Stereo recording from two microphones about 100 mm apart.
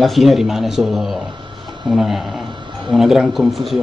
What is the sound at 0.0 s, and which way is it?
Speech, centre (ahead or behind).